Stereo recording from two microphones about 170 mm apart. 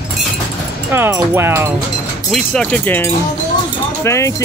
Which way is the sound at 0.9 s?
15° right (ahead or behind).